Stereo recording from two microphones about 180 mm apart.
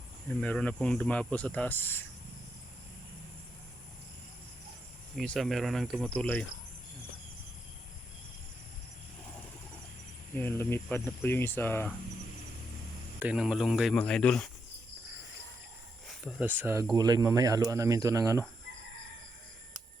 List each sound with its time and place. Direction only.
0.3 s speech: 5° left (ahead or behind)
5.1 s speech: centre (ahead or behind)
10.3 s speech: 10° left (ahead or behind)
13.1 s speech: 5° right (ahead or behind)
16.2 s speech: 10° right (ahead or behind)
16.9 s speech: 20° right (ahead or behind)